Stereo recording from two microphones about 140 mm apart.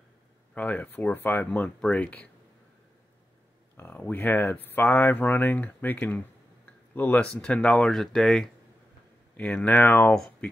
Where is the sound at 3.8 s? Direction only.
15° left (ahead or behind).